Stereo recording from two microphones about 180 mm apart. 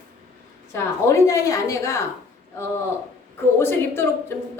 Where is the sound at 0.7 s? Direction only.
15° left (ahead or behind).